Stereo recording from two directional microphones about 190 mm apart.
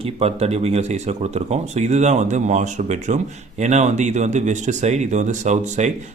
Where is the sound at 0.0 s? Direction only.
30° right (ahead or behind).